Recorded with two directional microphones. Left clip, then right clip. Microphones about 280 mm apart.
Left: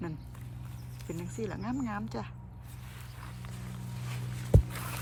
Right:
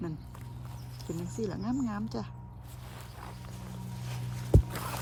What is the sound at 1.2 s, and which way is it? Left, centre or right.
Speech, centre.